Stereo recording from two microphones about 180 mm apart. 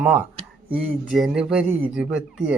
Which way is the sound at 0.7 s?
Centre (ahead or behind).